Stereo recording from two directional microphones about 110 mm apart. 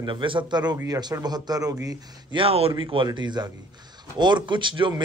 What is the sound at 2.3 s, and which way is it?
Speech, 60° right (ahead or behind).